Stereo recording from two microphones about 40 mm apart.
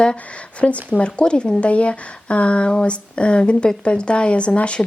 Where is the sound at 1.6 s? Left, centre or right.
Left.